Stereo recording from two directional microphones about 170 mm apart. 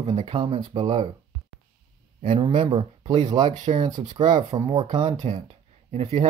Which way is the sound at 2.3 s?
35° right (ahead or behind).